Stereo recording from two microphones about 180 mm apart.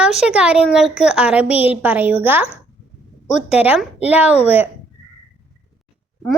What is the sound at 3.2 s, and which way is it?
Speech, 40° left (ahead or behind).